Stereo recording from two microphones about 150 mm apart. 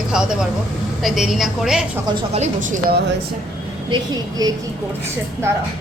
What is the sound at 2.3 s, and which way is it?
Speech, 50° right (ahead or behind).